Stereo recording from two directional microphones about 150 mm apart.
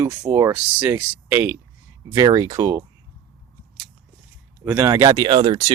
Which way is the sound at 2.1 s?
25° right (ahead or behind).